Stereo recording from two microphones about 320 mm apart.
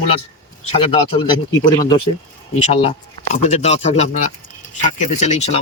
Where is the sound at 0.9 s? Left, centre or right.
Centre.